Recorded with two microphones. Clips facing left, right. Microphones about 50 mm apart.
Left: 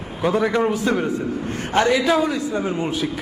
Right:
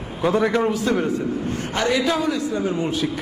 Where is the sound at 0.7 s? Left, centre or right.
Left.